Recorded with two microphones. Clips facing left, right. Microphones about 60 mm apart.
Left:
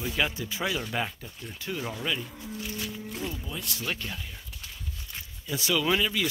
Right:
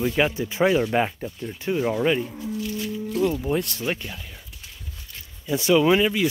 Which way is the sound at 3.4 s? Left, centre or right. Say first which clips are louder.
Right 13 dB; right.